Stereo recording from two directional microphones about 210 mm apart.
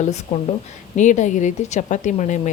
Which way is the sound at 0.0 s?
30° left (ahead or behind).